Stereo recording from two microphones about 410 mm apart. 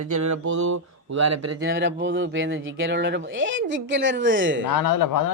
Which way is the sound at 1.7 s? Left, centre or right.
Right.